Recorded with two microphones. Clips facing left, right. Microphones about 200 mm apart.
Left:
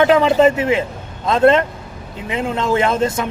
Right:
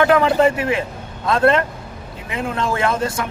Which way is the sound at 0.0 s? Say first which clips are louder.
Left 2 dB; 20° left (ahead or behind).